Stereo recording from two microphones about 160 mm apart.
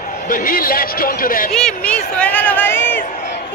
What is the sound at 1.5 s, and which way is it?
Speech, 5° left (ahead or behind).